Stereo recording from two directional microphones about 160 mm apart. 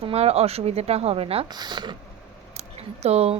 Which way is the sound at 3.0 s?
40° right (ahead or behind).